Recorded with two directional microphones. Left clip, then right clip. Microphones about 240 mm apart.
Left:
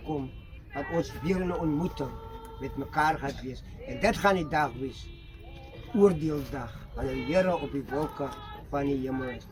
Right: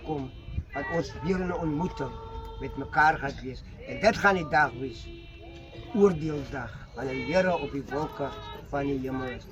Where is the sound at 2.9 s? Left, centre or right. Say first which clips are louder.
Right 4 dB; centre.